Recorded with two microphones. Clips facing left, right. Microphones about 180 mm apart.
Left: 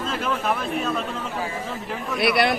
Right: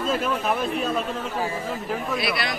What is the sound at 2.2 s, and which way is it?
Speech, 65° left (ahead or behind).